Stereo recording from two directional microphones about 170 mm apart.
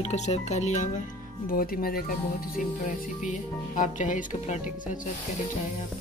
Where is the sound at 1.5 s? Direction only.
55° left (ahead or behind).